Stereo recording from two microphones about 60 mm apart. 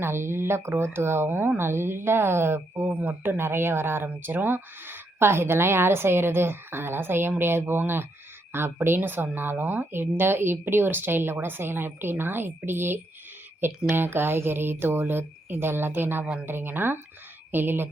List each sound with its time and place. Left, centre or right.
0.0 s speech: right
2.9 s speech: right
3.2 s speech: right
16.2 s a woman's voice: centre
16.5 s speech: right